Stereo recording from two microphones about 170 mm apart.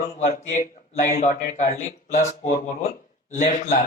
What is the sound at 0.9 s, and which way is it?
Speech, 50° left (ahead or behind).